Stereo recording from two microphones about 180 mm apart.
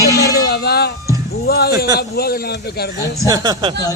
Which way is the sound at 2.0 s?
60° left (ahead or behind).